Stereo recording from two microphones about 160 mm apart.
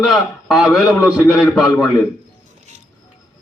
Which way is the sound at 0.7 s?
20° left (ahead or behind).